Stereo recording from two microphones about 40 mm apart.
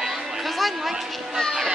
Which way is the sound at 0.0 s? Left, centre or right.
Centre.